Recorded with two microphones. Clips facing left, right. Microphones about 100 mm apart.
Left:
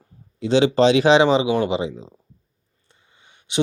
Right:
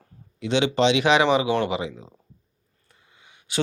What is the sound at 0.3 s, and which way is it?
Speech, 35° left (ahead or behind).